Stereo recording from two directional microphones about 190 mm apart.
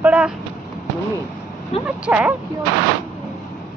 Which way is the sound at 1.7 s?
30° left (ahead or behind).